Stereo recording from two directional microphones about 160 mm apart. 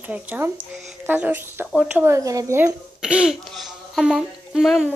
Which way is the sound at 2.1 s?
20° right (ahead or behind).